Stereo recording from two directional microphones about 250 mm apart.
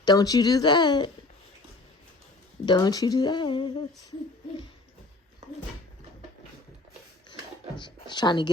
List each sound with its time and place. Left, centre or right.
0.0 s speech: centre
2.6 s speech: centre
7.8 s speech: centre